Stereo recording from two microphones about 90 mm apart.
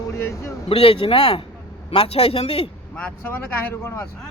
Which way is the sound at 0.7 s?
90° left.